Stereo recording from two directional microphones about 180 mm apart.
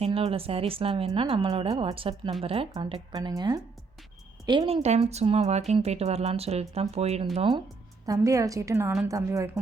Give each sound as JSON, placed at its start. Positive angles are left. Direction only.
{"t": 0.0, "sound": "speech", "side_deg": -35}
{"t": 8.0, "sound": "a woman's voice", "side_deg": -20}